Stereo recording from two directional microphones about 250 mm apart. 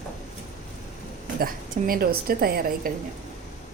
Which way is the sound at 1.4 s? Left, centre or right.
Right.